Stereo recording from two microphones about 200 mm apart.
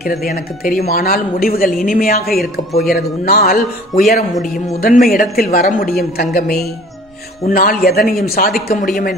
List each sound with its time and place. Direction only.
0.0 s speech: 50° left (ahead or behind)
4.3 s speech: centre (ahead or behind)
4.8 s speech: 45° left (ahead or behind)